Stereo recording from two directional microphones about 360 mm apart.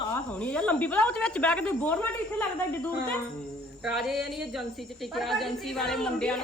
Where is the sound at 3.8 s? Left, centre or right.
Centre.